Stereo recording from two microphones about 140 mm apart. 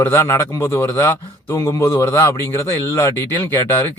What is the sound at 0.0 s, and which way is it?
Speech, 20° left (ahead or behind).